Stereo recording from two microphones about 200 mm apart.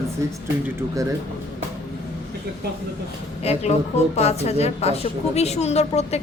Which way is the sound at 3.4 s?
30° left (ahead or behind).